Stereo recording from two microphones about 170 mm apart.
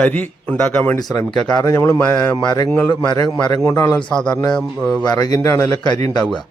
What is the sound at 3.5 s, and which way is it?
Speech, 15° left (ahead or behind).